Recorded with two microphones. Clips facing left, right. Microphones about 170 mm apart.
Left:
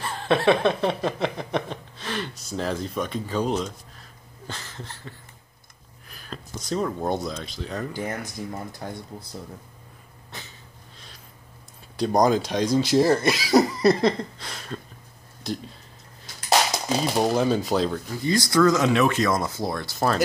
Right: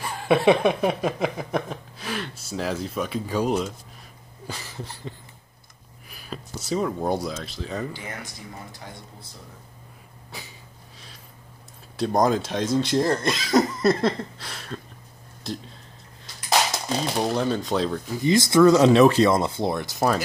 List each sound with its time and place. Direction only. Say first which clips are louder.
0.0 s a sound: right 2 dB; 10° right (ahead or behind)
6.0 s speech: right 2 dB; 10° right (ahead or behind)
7.9 s speech: left 6 dB; 45° left (ahead or behind)
12.0 s speech: left 1 dB; centre (ahead or behind)
16.7 s speech: left 2 dB; 10° left (ahead or behind)
18.1 s speech: right 4 dB; 20° right (ahead or behind)
18.8 s speech: right 6 dB; 35° right (ahead or behind); by 20.2 s 15° right (ahead or behind)